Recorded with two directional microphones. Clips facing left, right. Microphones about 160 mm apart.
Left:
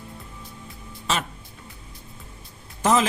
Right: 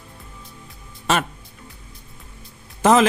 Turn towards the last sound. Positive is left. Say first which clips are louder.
# right 6 dB
turn(degrees=-70)  # may be behind; listen again after turning